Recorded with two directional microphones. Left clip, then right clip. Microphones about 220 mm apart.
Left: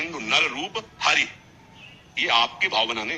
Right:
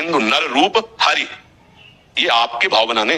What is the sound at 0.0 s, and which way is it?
A man's voice, 45° right (ahead or behind).